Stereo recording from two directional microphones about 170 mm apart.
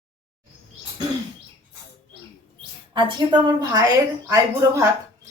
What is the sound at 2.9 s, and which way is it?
Speech, 25° right (ahead or behind).